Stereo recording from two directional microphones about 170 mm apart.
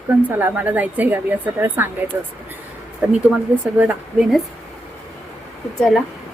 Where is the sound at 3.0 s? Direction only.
5° right (ahead or behind).